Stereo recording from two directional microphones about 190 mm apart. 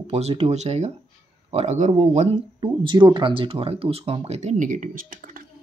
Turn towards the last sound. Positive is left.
turn(degrees=-45)  # may be behind; listen again after turning